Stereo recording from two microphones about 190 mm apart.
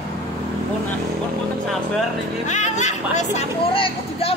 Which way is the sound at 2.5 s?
40° left (ahead or behind).